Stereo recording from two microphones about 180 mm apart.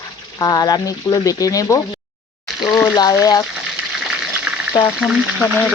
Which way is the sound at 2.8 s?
20° left (ahead or behind).